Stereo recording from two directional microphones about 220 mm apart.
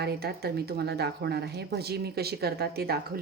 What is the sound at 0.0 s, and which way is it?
Speech, 45° right (ahead or behind).